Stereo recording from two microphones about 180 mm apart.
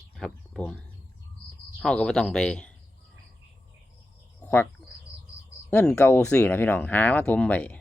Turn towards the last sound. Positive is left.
turn(degrees=10)  # may be behind; listen again after turning